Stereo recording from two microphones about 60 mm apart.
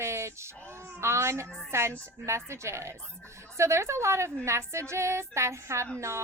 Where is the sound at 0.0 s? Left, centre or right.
Right.